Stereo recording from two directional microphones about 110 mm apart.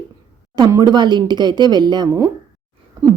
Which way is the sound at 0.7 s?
35° right (ahead or behind).